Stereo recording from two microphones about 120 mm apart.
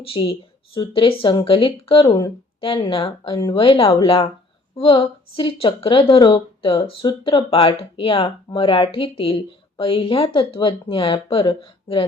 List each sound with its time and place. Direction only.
0.0 s speech: 50° left (ahead or behind)